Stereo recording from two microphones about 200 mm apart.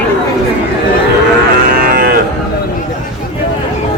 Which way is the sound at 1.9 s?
45° right (ahead or behind).